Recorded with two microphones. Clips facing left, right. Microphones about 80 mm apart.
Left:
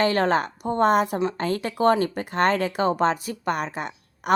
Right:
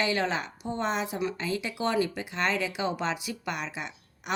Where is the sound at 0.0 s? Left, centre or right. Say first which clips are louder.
Left 7 dB; left.